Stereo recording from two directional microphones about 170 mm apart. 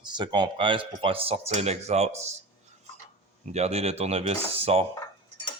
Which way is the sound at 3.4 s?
40° right (ahead or behind).